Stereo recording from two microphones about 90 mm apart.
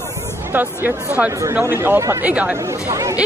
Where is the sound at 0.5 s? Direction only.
20° right (ahead or behind).